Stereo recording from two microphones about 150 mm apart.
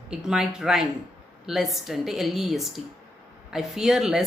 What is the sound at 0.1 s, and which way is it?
Speech, 5° right (ahead or behind).